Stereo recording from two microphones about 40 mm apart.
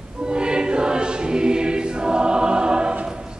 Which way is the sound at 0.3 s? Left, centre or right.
Right.